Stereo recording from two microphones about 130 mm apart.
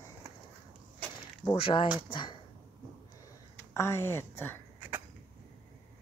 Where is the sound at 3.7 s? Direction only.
20° left (ahead or behind).